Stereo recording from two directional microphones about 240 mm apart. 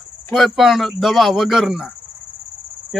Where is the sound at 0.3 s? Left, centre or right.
Centre.